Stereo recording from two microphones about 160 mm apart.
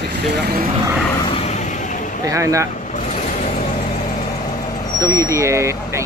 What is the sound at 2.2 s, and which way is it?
Speech, 20° right (ahead or behind).